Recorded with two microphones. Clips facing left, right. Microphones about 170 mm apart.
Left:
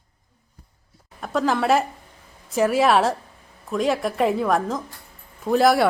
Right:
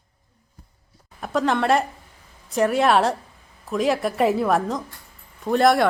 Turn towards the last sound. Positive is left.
turn(degrees=0)  # may be behind; listen again after turning